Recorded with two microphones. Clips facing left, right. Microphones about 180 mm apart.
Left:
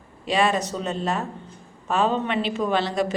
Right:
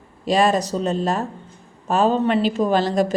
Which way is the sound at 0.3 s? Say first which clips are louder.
Right 4 dB; 40° right (ahead or behind).